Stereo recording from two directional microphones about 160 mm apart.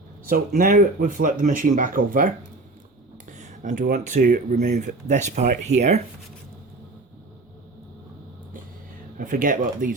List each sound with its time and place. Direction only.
0.3 s speech: 60° right (ahead or behind)
4.6 s speech: 50° right (ahead or behind)
9.1 s speech: 55° right (ahead or behind)